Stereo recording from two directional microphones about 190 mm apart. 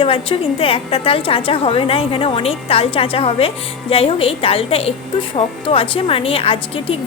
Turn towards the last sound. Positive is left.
turn(degrees=30)  # may be behind; listen again after turning